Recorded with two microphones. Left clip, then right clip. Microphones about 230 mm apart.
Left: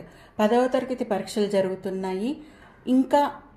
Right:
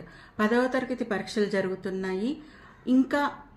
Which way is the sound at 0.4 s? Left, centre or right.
Centre.